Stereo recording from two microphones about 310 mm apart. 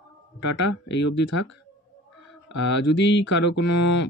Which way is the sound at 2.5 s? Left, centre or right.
Left.